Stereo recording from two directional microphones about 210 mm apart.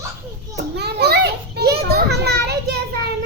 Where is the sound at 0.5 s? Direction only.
50° right (ahead or behind).